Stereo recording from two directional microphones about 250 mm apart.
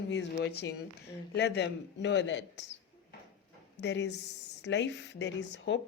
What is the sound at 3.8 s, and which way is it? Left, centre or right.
A woman's voice, left.